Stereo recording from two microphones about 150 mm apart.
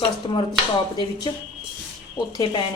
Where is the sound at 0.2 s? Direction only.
35° left (ahead or behind).